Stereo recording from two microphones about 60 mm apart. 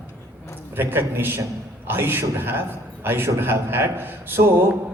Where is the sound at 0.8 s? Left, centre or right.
Right.